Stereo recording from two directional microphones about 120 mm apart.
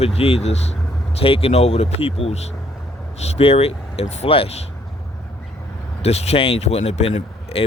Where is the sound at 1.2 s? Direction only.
55° left (ahead or behind).